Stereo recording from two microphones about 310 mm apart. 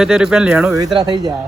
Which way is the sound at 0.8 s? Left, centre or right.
Centre.